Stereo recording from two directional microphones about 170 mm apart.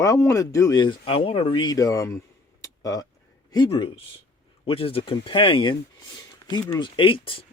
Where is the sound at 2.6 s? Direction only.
20° left (ahead or behind).